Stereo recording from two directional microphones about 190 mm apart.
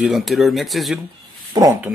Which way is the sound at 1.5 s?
20° right (ahead or behind).